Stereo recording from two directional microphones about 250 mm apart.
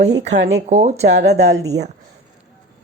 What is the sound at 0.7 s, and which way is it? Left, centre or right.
Speech, right.